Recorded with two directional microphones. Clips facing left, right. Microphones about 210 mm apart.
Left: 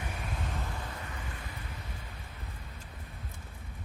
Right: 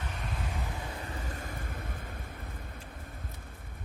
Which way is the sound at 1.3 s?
45° right (ahead or behind).